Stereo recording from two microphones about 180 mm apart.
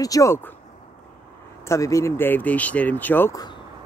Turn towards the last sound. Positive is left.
turn(degrees=15)  # may be behind; listen again after turning